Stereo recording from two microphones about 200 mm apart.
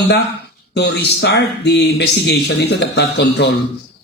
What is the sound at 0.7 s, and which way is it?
A man's voice, 55° left (ahead or behind).